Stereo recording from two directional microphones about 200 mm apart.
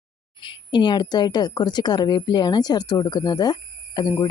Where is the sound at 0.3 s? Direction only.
25° left (ahead or behind).